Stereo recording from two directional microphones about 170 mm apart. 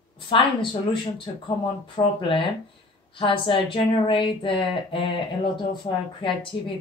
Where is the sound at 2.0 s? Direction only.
30° left (ahead or behind).